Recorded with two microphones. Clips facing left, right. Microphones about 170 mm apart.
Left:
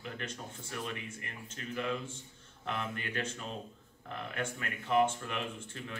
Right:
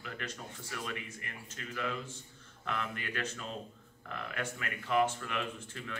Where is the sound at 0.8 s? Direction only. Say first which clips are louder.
Even; 30° left (ahead or behind).